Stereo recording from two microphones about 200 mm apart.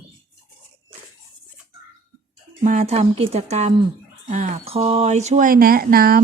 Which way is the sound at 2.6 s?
35° right (ahead or behind).